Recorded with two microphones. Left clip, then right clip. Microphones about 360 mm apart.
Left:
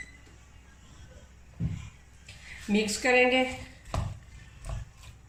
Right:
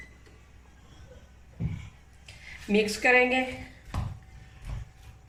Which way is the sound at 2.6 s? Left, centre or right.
Right.